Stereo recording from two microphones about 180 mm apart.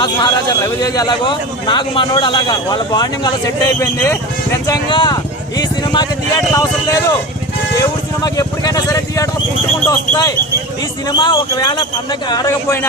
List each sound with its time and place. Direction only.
0.0 s a man's voice: 25° left (ahead or behind)
4.6 s a sound: 20° left (ahead or behind)
6.5 s a man's voice: 20° left (ahead or behind)